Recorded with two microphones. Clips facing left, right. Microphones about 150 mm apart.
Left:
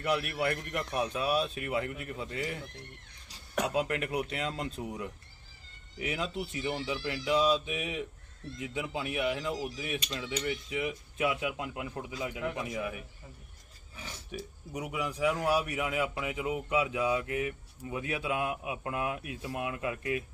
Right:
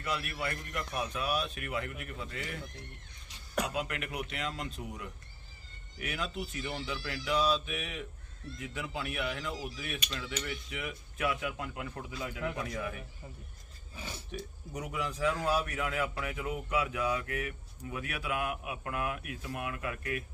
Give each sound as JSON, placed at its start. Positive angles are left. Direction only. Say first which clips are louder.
{"t": 0.0, "sound": "a man's voice", "louder": "left 6 dB", "side_deg": 60}
{"t": 0.9, "sound": "speech", "louder": "left 4 dB", "side_deg": 30}
{"t": 3.6, "sound": "a man's voice", "louder": "left 4 dB", "side_deg": 30}
{"t": 14.3, "sound": "a man's voice", "louder": "left 1 dB", "side_deg": 10}